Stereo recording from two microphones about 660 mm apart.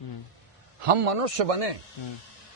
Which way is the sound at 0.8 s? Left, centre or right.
Right.